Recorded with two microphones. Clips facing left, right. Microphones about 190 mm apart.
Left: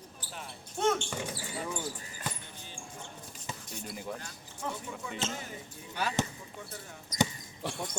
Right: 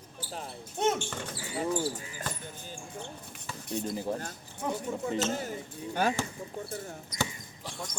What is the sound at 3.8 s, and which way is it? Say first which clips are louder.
Speech: right 9 dB; 35° right (ahead or behind).